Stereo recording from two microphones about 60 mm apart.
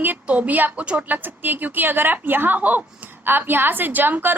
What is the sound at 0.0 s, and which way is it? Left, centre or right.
A woman's voice, right.